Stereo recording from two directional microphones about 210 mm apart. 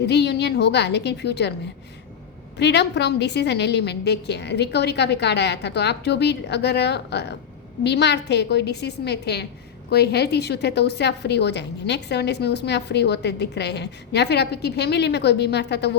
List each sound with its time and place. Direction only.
0.0 s a woman's voice: 55° left (ahead or behind)
2.6 s a woman's voice: 55° left (ahead or behind)